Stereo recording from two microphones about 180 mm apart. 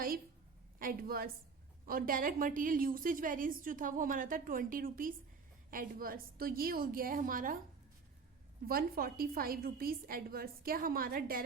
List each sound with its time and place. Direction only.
0.8 s a woman's voice: 55° right (ahead or behind)
8.6 s a woman's voice: 55° right (ahead or behind)